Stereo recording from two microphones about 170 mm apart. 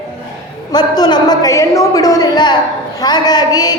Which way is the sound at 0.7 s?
25° left (ahead or behind).